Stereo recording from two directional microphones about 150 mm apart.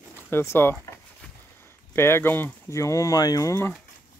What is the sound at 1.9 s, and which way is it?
Speech, 15° left (ahead or behind).